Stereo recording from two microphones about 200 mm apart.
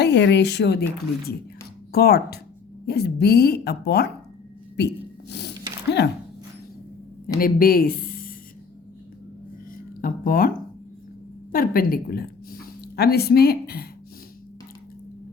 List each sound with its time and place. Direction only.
0.0 s speech: 60° left (ahead or behind)
1.9 s speech: 50° left (ahead or behind)
6.0 s speech: 60° left (ahead or behind)
7.3 s speech: 45° left (ahead or behind)
10.0 s speech: 45° left (ahead or behind)
11.5 s speech: 45° left (ahead or behind)